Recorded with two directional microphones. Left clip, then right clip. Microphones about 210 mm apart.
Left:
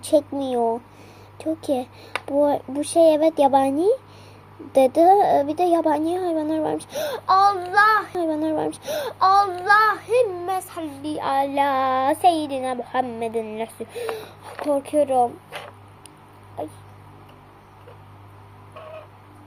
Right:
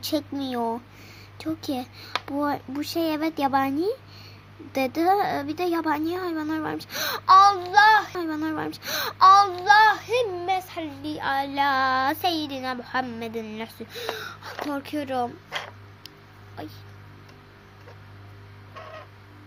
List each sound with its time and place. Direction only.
0.0 s a child's voice: 25° right (ahead or behind)
8.2 s a child's voice: 15° right (ahead or behind)